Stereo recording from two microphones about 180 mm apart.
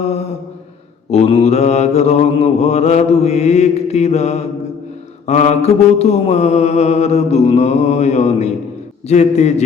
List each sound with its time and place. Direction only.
1.1 s mantra: 35° left (ahead or behind)